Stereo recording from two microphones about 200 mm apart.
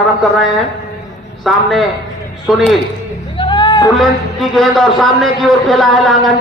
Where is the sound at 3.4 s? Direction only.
25° left (ahead or behind).